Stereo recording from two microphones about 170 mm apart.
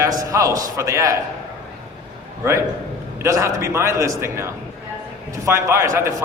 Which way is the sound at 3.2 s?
15° right (ahead or behind).